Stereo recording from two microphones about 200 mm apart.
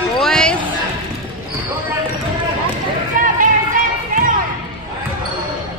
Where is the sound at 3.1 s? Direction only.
45° right (ahead or behind).